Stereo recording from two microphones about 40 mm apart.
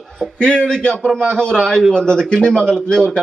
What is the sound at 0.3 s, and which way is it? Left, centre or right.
A man's voice, left.